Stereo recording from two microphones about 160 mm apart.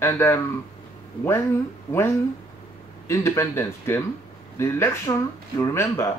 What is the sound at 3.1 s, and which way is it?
Speech, 15° left (ahead or behind).